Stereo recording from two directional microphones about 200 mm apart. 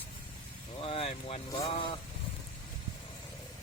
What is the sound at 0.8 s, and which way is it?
Speech, 30° left (ahead or behind).